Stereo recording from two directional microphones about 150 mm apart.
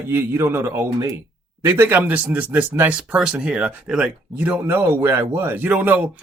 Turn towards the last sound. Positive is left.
turn(degrees=-10)  # may be behind; listen again after turning